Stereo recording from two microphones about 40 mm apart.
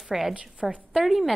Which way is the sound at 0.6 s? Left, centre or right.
Right.